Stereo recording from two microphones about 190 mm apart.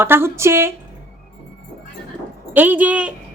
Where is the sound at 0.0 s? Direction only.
10° right (ahead or behind).